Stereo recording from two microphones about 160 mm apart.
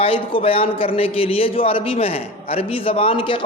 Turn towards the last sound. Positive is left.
turn(degrees=35)  # may be behind; listen again after turning